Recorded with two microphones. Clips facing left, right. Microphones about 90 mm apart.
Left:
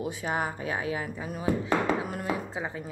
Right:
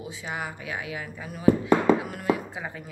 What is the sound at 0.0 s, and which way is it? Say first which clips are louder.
Speech: left 4 dB; 45° left (ahead or behind).